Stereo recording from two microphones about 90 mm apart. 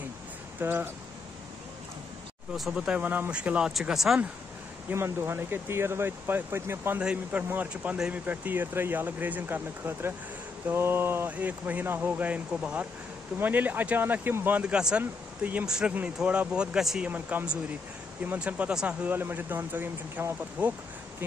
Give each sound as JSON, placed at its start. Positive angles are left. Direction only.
{"t": 0.6, "sound": "speech", "side_deg": -25}
{"t": 2.5, "sound": "speech", "side_deg": -5}
{"t": 3.0, "sound": "speech", "side_deg": -20}
{"t": 4.8, "sound": "speech", "side_deg": -25}
{"t": 7.0, "sound": "speech", "side_deg": -10}
{"t": 17.1, "sound": "speech", "side_deg": -20}
{"t": 19.0, "sound": "speech", "side_deg": -20}